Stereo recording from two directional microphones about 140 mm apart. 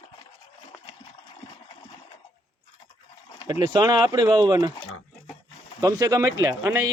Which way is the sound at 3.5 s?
30° right (ahead or behind).